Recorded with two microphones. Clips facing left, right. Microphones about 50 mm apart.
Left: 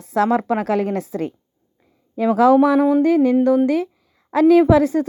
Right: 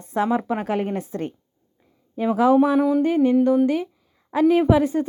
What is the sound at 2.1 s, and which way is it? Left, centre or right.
Speech, left.